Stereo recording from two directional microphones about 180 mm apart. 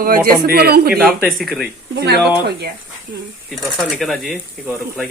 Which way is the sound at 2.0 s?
60° right (ahead or behind).